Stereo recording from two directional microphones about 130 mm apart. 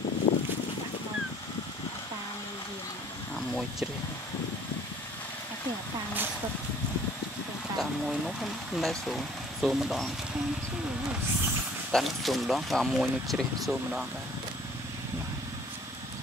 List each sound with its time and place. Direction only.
0.3 s boat: 45° left (ahead or behind)
7.7 s speech: centre (ahead or behind)
11.9 s speech: centre (ahead or behind)